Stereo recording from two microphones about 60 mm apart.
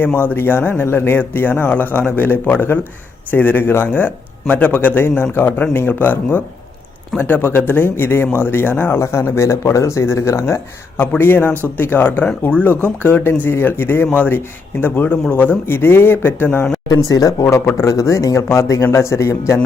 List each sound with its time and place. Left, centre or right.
0.0 s speech: left
11.2 s speech: left
13.2 s speech: left
16.9 s speech: left
17.7 s speech: left
18.4 s speech: left